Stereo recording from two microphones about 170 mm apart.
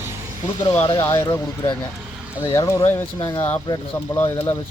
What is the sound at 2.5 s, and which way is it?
Speech, 20° left (ahead or behind).